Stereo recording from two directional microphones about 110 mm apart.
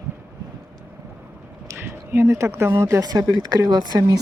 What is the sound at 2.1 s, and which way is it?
Speech, 25° right (ahead or behind).